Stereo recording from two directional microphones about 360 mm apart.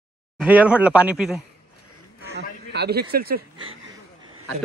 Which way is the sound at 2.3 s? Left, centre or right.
Right.